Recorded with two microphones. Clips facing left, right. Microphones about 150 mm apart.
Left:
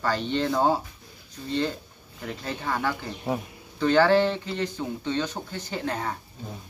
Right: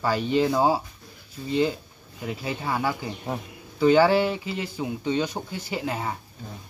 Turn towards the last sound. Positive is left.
turn(degrees=-5)  # may be behind; listen again after turning